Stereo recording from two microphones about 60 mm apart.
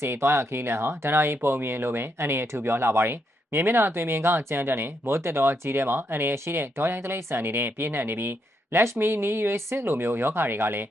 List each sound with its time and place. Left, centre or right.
0.0 s speech: right